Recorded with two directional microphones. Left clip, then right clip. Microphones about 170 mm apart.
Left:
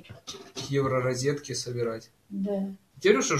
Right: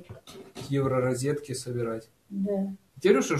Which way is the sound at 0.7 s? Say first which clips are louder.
Even; 45° right (ahead or behind).